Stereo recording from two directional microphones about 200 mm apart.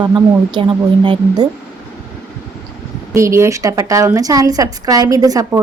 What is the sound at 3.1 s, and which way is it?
A woman's voice, 15° right (ahead or behind).